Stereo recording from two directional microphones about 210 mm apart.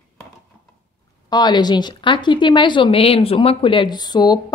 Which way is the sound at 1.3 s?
20° left (ahead or behind).